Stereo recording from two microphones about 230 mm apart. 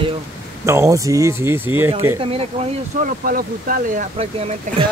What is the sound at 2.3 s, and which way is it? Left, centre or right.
Speech, right.